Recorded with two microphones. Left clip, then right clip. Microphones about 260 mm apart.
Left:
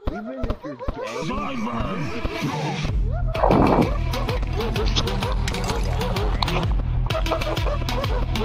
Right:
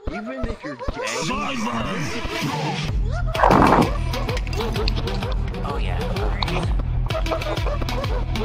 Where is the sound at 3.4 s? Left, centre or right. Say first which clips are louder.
Right 3 dB; right.